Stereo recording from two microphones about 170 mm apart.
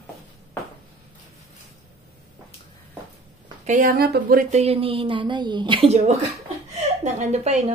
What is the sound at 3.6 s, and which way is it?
Speech, 50° right (ahead or behind).